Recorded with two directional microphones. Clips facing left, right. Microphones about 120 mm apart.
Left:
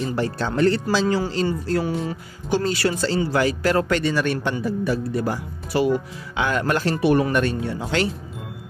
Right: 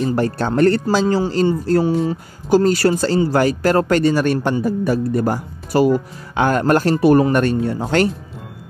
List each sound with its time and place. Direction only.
0.0 s a man's voice: 50° right (ahead or behind)
1.0 s a man's voice: 30° right (ahead or behind); by 8.1 s 45° right (ahead or behind)